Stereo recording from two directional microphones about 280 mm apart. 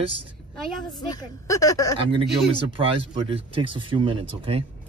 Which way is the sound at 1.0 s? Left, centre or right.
Centre.